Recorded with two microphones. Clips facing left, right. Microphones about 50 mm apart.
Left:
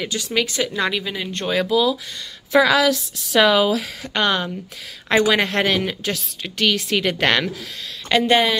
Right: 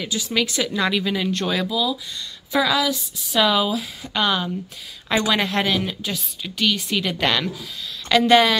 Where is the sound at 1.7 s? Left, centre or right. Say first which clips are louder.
Left 5 dB; left.